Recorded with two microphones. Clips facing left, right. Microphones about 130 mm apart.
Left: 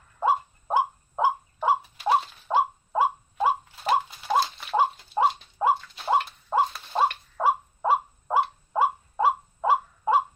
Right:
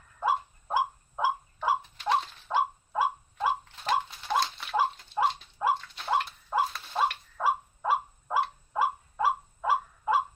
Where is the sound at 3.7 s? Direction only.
5° left (ahead or behind).